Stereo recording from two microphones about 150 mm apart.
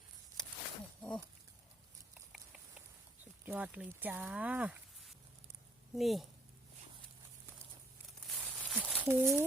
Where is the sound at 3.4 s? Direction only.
10° right (ahead or behind).